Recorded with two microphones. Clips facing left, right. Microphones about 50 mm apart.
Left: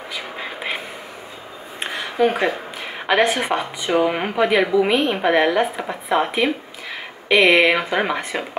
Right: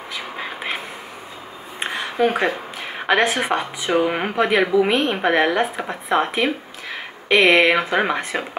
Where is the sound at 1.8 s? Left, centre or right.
Centre.